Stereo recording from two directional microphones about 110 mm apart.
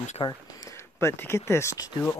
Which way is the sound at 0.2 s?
30° left (ahead or behind).